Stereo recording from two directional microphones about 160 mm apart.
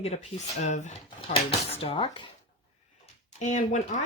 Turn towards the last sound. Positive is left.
turn(degrees=50)  # may be behind; listen again after turning